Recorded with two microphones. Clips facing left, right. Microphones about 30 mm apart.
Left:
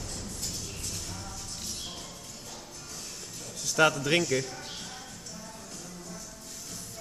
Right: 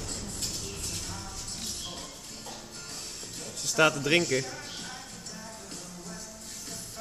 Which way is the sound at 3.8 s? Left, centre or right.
Centre.